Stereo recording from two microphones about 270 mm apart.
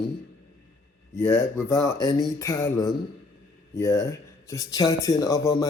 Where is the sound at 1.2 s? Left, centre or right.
Centre.